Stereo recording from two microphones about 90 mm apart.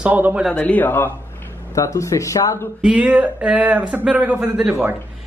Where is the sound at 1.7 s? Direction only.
35° left (ahead or behind).